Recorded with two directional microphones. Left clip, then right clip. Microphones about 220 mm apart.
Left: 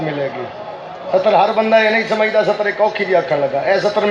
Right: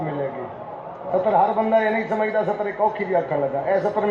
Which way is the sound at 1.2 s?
30° left (ahead or behind).